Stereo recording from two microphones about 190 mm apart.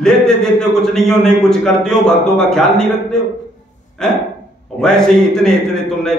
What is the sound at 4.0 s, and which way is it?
A man's voice, 5° left (ahead or behind).